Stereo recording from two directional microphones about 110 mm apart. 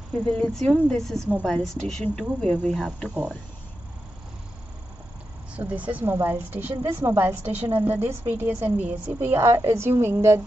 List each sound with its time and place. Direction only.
0.3 s speech: 5° left (ahead or behind)
5.6 s a woman's voice: 15° right (ahead or behind)